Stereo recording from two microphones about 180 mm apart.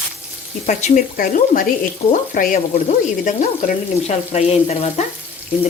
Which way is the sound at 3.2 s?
45° left (ahead or behind).